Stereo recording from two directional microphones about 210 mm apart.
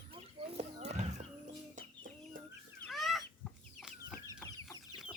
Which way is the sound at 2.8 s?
Centre (ahead or behind).